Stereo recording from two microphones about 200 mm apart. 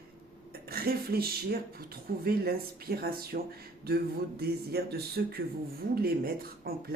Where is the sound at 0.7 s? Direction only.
50° right (ahead or behind).